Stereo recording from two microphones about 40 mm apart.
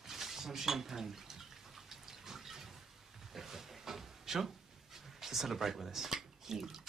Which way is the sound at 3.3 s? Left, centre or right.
Centre.